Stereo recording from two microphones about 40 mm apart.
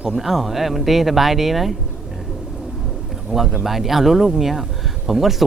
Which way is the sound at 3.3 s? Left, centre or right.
Centre.